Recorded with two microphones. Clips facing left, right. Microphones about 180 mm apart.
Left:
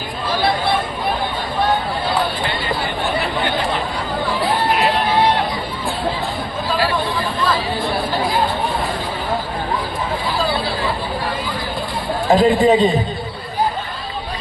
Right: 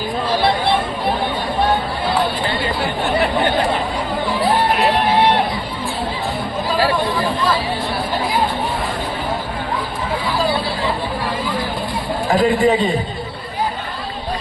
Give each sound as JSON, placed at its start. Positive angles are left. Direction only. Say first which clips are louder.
{"t": 12.3, "sound": "a man's voice", "louder": "left 2 dB", "side_deg": 20}